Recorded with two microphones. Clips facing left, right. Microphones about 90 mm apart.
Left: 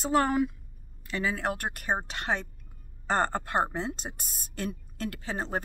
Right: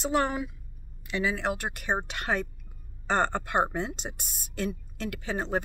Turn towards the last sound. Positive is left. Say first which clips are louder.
# right 3 dB
turn(degrees=35)  # may be behind; listen again after turning